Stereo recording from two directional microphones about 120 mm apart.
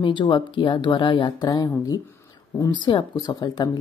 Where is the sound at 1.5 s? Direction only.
30° left (ahead or behind).